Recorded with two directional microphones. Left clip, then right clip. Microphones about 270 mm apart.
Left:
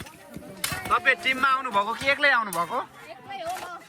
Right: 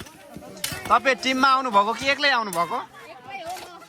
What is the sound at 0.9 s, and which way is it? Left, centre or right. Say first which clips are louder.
Speech: right 2 dB; centre.